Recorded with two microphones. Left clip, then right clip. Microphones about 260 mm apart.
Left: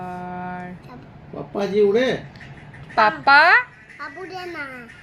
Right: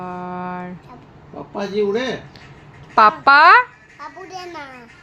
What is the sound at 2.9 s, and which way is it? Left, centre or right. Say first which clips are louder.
Speech: right 3 dB; centre.